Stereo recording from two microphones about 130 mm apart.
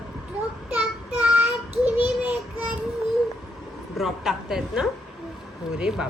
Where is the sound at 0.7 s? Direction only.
10° right (ahead or behind).